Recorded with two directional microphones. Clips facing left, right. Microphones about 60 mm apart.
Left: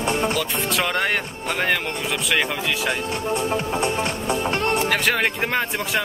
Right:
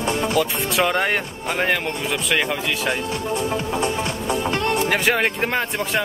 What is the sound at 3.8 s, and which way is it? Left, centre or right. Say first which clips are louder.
Music: even; left.